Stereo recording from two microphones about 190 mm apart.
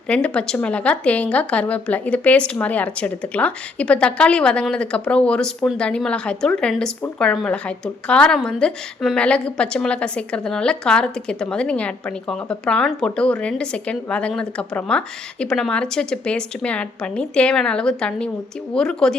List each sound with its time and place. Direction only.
0.1 s a woman's voice: 5° left (ahead or behind)